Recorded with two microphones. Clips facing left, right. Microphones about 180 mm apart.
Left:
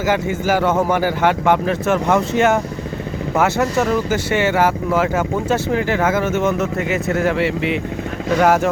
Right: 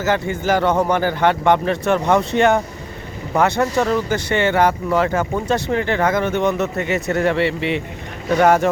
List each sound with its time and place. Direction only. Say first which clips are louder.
0.0 s speech: left 1 dB; 10° left (ahead or behind)